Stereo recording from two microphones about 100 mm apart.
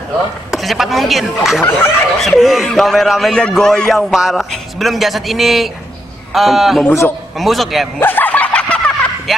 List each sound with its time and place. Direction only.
0.5 s a man's voice: centre (ahead or behind)
1.6 s speech: 25° left (ahead or behind)
2.1 s a man's voice: centre (ahead or behind)
6.9 s speech: 30° left (ahead or behind)
7.3 s a man's voice: centre (ahead or behind)
8.0 s fowl: 20° left (ahead or behind)